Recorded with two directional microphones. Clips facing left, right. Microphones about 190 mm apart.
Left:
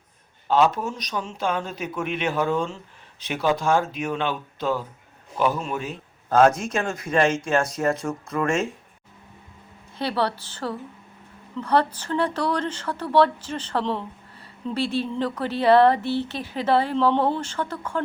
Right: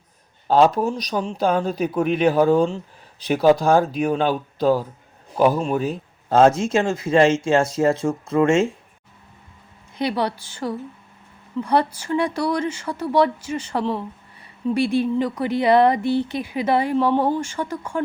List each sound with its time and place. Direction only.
0.4 s a man's voice: 40° right (ahead or behind)
10.0 s speech: 15° right (ahead or behind)